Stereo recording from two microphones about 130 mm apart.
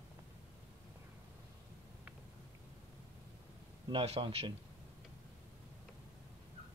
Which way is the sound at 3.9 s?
45° right (ahead or behind).